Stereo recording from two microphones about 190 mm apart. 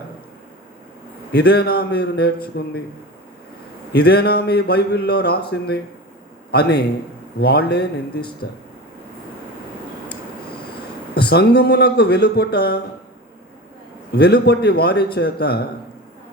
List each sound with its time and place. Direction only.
1.3 s a man's voice: 60° left (ahead or behind)
3.9 s a man's voice: 60° left (ahead or behind)
11.1 s a man's voice: 55° left (ahead or behind)
14.1 s a man's voice: 60° left (ahead or behind)